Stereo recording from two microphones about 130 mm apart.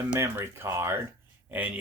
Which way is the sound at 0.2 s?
20° right (ahead or behind).